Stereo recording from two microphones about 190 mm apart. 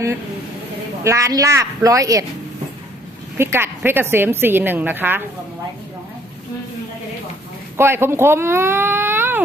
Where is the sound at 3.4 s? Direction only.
15° right (ahead or behind).